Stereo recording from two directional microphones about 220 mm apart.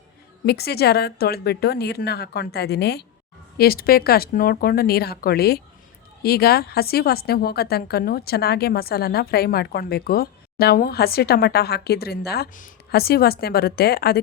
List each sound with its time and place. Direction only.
0.4 s a woman's voice: 45° left (ahead or behind)